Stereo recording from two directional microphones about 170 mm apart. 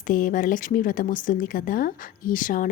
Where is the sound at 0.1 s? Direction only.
50° left (ahead or behind).